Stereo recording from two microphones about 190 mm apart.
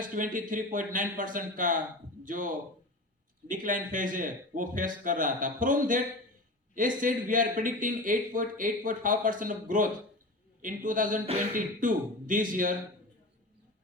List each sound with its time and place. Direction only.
0.0 s a man's voice: 45° right (ahead or behind)
7.0 s a man's voice: 45° right (ahead or behind)